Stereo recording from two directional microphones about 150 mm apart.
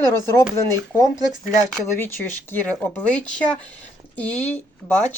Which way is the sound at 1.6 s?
10° left (ahead or behind).